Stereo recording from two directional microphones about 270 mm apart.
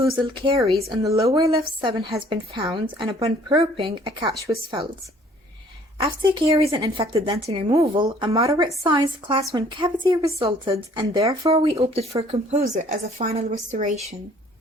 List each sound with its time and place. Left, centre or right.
0.0 s a woman's voice: centre
6.5 s a woman's voice: centre